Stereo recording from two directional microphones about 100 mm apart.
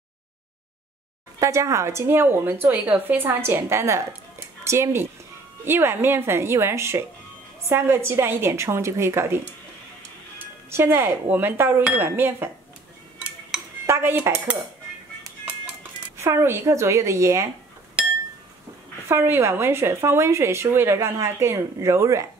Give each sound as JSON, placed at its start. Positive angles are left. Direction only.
{"t": 1.4, "sound": "speech", "side_deg": -30}
{"t": 10.4, "sound": "speech", "side_deg": -25}
{"t": 13.8, "sound": "speech", "side_deg": -25}
{"t": 16.2, "sound": "speech", "side_deg": -25}
{"t": 19.0, "sound": "speech", "side_deg": -25}